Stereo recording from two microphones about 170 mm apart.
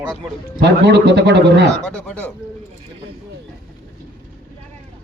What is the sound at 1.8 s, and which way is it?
Speech, 5° left (ahead or behind).